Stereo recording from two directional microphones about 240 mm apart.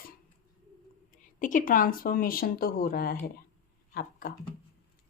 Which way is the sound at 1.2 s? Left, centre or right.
Left.